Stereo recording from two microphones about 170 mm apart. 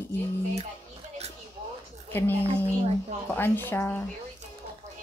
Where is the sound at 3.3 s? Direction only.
15° left (ahead or behind).